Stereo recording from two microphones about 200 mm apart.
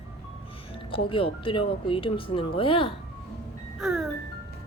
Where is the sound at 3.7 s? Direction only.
Centre (ahead or behind).